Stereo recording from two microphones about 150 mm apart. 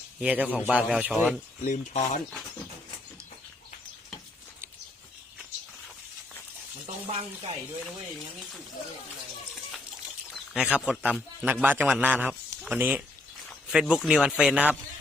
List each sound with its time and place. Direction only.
0.2 s speech: 10° right (ahead or behind)
1.6 s speech: 55° left (ahead or behind)
7.1 s speech: 40° right (ahead or behind)
10.3 s speech: 5° right (ahead or behind)